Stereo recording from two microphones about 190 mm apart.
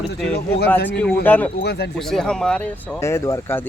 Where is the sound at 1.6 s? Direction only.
60° left (ahead or behind).